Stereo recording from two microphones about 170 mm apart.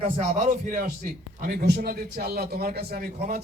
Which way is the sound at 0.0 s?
45° right (ahead or behind).